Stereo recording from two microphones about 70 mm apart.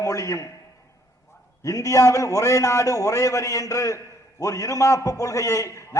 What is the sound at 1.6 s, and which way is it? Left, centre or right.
A man's voice, left.